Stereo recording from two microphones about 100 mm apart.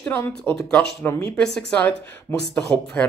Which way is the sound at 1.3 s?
10° left (ahead or behind).